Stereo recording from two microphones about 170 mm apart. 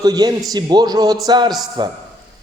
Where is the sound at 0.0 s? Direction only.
25° right (ahead or behind).